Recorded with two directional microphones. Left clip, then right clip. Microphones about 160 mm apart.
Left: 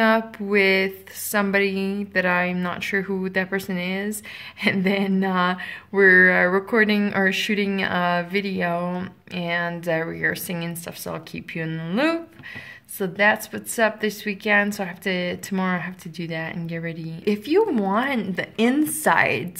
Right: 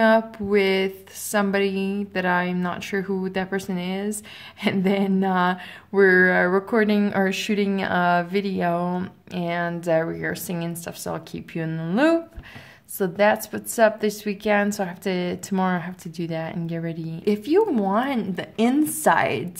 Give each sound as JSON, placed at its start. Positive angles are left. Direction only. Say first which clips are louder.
{"t": 0.0, "sound": "a woman's voice", "louder": "right 1 dB", "side_deg": -20}
{"t": 17.2, "sound": "a woman's voice", "louder": "even", "side_deg": -20}